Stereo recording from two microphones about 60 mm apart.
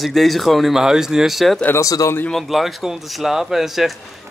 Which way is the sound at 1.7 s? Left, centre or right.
Left.